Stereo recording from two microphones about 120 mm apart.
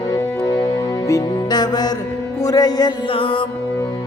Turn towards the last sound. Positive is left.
turn(degrees=50)  # may be behind; listen again after turning